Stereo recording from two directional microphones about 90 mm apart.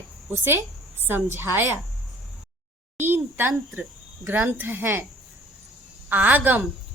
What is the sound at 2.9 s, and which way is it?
A woman's voice, 25° right (ahead or behind).